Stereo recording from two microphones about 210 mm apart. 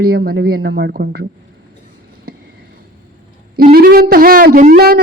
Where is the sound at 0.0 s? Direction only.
45° right (ahead or behind).